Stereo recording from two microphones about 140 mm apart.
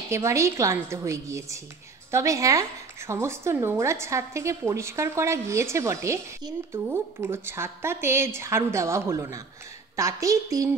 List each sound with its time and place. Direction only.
0.1 s a woman's voice: 20° right (ahead or behind)